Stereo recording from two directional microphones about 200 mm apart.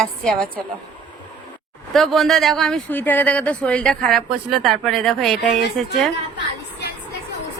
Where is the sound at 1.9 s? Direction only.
Centre (ahead or behind).